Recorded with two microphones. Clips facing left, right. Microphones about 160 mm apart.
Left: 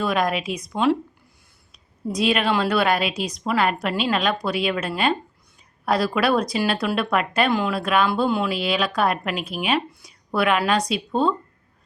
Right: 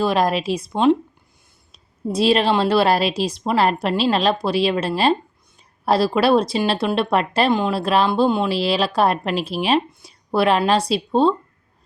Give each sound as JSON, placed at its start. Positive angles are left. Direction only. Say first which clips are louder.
{"t": 0.0, "sound": "a woman's voice", "louder": "right 4 dB", "side_deg": -30}